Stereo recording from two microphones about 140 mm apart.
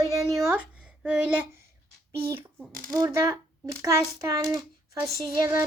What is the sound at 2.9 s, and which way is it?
A child's voice, 20° right (ahead or behind).